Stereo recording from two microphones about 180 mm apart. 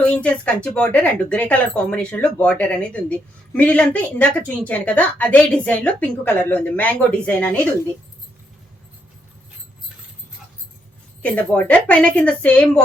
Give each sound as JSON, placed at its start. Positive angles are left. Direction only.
{"t": 0.0, "sound": "speech", "side_deg": 5}
{"t": 11.2, "sound": "speech", "side_deg": 5}